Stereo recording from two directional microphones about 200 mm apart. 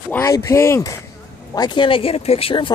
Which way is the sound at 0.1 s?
15° left (ahead or behind).